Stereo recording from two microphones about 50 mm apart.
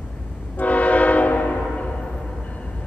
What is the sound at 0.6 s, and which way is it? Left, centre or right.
Train horn, left.